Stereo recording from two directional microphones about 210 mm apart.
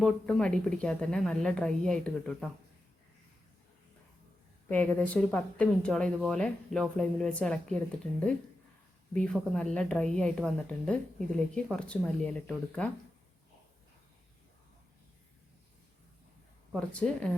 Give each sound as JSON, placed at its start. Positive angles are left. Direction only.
{"t": 0.0, "sound": "speech", "side_deg": 5}
{"t": 4.7, "sound": "speech", "side_deg": 5}
{"t": 9.1, "sound": "speech", "side_deg": 5}
{"t": 16.7, "sound": "speech", "side_deg": 5}